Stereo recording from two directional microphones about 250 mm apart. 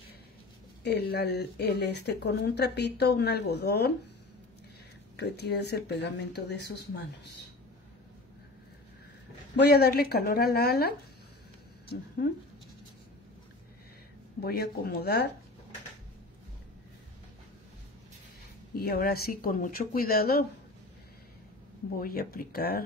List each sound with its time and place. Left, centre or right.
0.8 s speech: left
5.1 s speech: left
9.6 s speech: left
14.4 s speech: left
18.8 s speech: left
21.9 s speech: left